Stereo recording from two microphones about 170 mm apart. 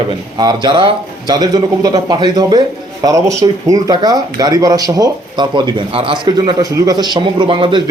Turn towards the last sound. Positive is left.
turn(degrees=-30)  # may be behind; listen again after turning